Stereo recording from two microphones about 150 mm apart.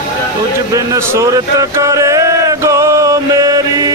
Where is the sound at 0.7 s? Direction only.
20° right (ahead or behind).